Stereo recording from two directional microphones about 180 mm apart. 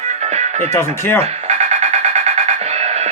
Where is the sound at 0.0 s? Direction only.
40° right (ahead or behind).